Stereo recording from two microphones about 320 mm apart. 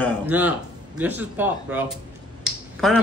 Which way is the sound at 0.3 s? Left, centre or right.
Centre.